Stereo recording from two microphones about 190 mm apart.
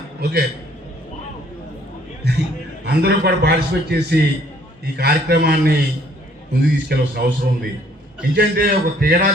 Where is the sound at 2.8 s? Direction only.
60° right (ahead or behind).